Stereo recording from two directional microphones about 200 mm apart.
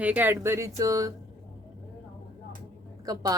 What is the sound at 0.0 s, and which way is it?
Speech, 10° right (ahead or behind).